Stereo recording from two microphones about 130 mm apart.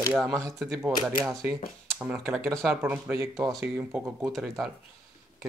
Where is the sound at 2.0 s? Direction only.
5° right (ahead or behind).